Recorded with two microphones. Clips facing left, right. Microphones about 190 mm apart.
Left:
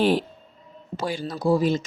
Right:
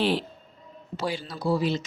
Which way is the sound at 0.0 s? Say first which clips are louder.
Left 4 dB; 45° left (ahead or behind).